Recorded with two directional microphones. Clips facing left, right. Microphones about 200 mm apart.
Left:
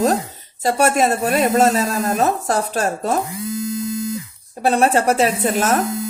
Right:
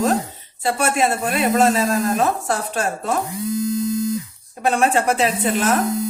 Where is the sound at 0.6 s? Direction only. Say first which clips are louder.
Left 3 dB; 40° left (ahead or behind).